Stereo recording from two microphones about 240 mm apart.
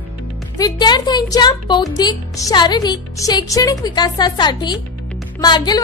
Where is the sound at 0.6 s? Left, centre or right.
Centre.